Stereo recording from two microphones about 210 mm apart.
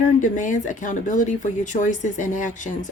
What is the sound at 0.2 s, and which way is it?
Speech, 40° left (ahead or behind).